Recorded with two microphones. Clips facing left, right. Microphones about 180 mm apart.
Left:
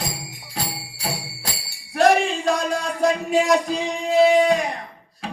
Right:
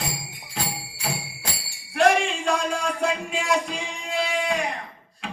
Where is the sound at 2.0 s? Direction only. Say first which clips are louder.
Left 3 dB; 40° left (ahead or behind).